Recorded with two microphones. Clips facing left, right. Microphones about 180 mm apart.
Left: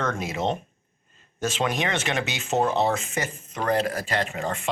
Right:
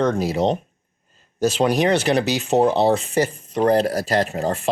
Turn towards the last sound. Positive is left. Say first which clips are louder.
# right 7 dB
turn(degrees=-40)  # may be behind; listen again after turning